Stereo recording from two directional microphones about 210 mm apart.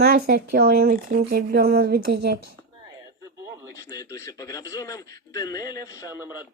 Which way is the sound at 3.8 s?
15° left (ahead or behind).